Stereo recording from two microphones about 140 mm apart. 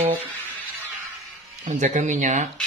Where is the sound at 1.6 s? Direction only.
60° right (ahead or behind).